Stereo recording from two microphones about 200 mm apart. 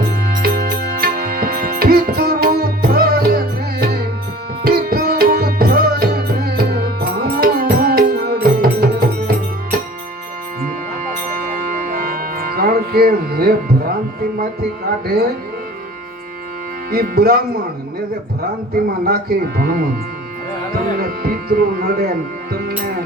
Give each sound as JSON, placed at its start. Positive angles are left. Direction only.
{"t": 0.1, "sound": "music", "side_deg": -45}
{"t": 11.3, "sound": "music", "side_deg": -45}
{"t": 15.0, "sound": "speech", "side_deg": -50}
{"t": 16.9, "sound": "speech", "side_deg": -50}
{"t": 19.0, "sound": "speech", "side_deg": -50}
{"t": 20.9, "sound": "speech", "side_deg": -45}